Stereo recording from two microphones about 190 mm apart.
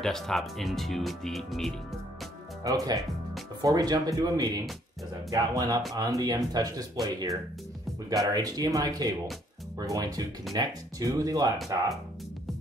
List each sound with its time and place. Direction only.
0.0 s speech: centre (ahead or behind)
2.6 s speech: 20° right (ahead or behind)
11.5 s speech: centre (ahead or behind)